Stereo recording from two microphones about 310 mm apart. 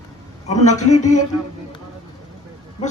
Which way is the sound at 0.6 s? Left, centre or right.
Left.